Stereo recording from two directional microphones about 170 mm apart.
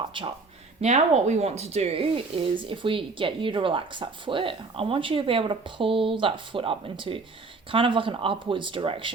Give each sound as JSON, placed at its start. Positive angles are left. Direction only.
{"t": 0.1, "sound": "speech", "side_deg": -30}
{"t": 0.8, "sound": "speech", "side_deg": -40}